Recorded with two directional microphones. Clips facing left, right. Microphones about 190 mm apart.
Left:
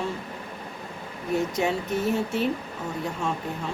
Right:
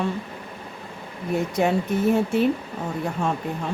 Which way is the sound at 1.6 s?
55° right (ahead or behind).